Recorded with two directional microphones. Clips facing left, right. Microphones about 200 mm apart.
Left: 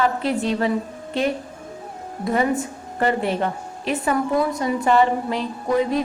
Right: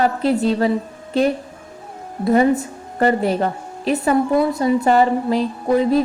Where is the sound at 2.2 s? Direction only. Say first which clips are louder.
Right 6 dB; 40° right (ahead or behind).